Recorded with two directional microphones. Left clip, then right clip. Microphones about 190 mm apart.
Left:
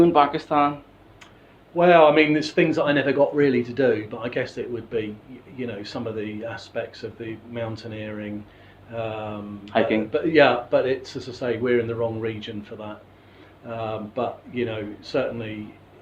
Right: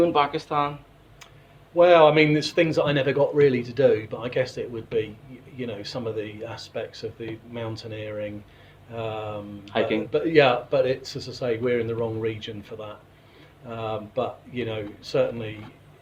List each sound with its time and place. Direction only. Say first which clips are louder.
0.0 s speech: left 4 dB; 25° right (ahead or behind)
1.7 s speech: left 1 dB; 45° right (ahead or behind)
9.6 s speech: left 3 dB; 25° right (ahead or behind)
10.1 s speech: even; 45° right (ahead or behind)